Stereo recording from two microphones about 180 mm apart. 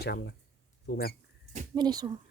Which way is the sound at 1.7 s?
20° right (ahead or behind).